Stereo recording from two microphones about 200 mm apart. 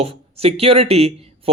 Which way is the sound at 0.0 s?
30° right (ahead or behind).